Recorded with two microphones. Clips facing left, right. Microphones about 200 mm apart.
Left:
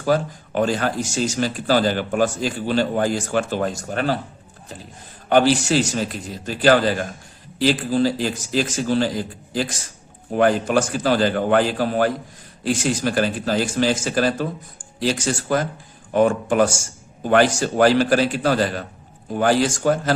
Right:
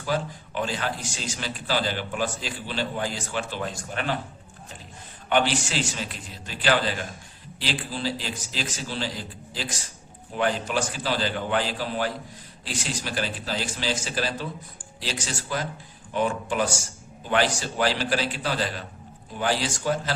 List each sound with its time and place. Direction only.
0.0 s a man's voice: 45° left (ahead or behind)
5.3 s a man's voice: 40° left (ahead or behind)